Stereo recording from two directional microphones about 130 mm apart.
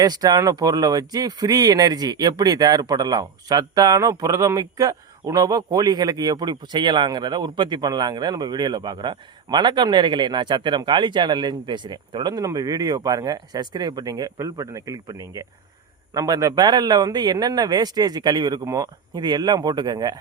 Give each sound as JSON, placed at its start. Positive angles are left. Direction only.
{"t": 0.0, "sound": "speech", "side_deg": -30}